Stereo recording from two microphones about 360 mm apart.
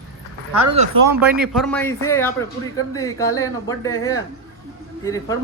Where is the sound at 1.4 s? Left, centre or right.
Centre.